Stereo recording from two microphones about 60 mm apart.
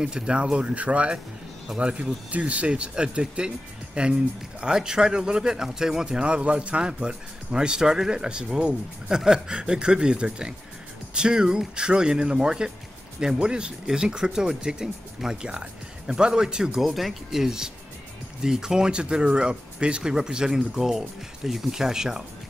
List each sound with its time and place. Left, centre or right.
0.0 s speech: centre